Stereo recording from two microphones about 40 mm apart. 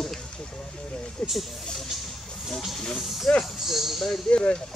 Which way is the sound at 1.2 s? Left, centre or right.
Left.